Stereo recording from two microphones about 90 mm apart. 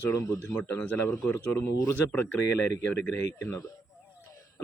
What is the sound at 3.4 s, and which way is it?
Speech, 30° left (ahead or behind).